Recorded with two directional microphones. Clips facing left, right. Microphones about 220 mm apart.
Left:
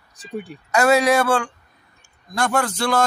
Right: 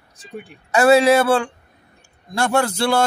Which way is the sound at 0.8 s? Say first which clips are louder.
Right 3 dB; 30° right (ahead or behind).